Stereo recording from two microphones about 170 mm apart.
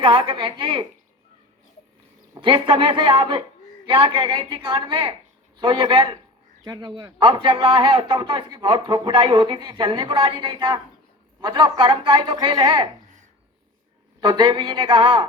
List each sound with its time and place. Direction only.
0.0 s a woman's voice: 30° right (ahead or behind)
2.3 s a man's voice: 30° right (ahead or behind)
14.2 s a man's voice: 25° right (ahead or behind)